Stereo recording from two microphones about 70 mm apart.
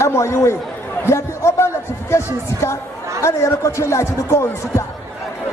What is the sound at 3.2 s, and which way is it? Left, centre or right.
Speech, left.